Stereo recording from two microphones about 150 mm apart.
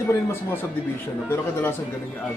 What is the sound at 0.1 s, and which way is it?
Speech, 15° left (ahead or behind).